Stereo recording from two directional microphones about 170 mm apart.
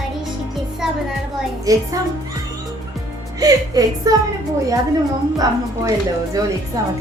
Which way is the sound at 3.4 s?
20° right (ahead or behind).